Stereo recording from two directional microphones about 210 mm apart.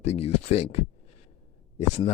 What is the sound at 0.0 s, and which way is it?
Speech, 30° left (ahead or behind).